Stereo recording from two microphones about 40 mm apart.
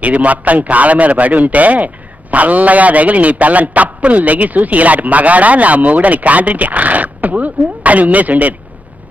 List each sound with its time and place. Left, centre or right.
0.0 s a man's voice: right